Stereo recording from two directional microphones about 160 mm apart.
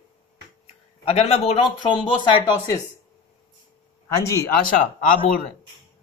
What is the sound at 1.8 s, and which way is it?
Speech, 30° left (ahead or behind).